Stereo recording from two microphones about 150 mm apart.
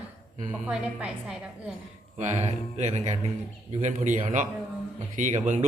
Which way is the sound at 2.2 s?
50° right (ahead or behind).